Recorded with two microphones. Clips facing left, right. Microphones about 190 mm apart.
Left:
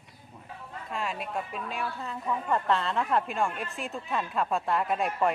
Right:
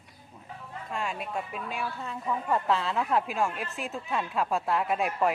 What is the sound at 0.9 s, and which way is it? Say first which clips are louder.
A woman's voice: even; centre (ahead or behind).